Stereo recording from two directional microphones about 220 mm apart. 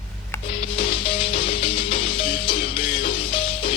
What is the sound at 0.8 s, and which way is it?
Music, 25° left (ahead or behind).